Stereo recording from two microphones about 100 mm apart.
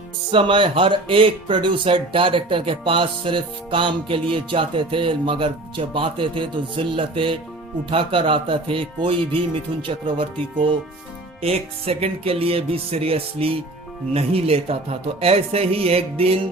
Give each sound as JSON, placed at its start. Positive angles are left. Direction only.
{"t": 0.3, "sound": "speech", "side_deg": -60}
{"t": 11.4, "sound": "speech", "side_deg": -80}